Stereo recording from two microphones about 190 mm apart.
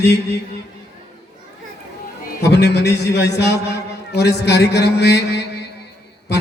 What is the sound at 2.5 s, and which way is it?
A man's voice, 60° left (ahead or behind).